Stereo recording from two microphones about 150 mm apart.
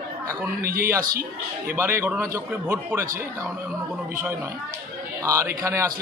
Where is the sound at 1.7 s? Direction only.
15° right (ahead or behind).